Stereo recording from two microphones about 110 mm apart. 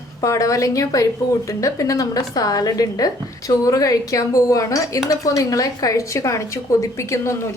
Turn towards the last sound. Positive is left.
turn(degrees=25)  # may be behind; listen again after turning